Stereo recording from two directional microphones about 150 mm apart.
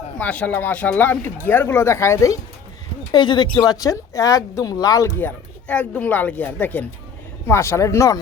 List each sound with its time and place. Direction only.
0.2 s speech: 10° left (ahead or behind)
3.1 s speech: 30° left (ahead or behind)